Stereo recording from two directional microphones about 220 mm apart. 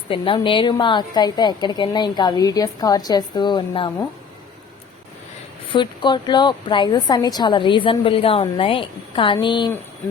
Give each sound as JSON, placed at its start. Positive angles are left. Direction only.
{"t": 0.1, "sound": "a woman's voice", "side_deg": 25}
{"t": 5.7, "sound": "a woman's voice", "side_deg": 20}